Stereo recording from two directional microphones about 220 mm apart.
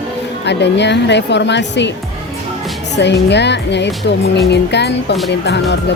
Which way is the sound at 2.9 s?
50° left (ahead or behind).